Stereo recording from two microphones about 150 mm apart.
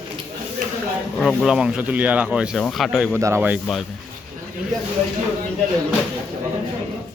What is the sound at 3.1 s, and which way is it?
Speech, 20° right (ahead or behind).